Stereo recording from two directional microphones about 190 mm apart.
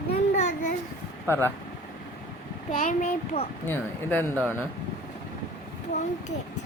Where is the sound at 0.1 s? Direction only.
35° left (ahead or behind).